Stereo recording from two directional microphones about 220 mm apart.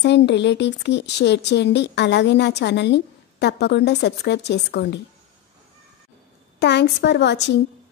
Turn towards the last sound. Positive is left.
turn(degrees=50)  # may be behind; listen again after turning